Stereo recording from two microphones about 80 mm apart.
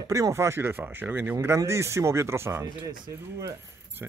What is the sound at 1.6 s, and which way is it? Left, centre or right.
Speech, right.